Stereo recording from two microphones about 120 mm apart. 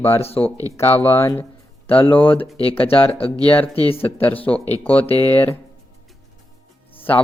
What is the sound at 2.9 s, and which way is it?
Speech, 50° left (ahead or behind).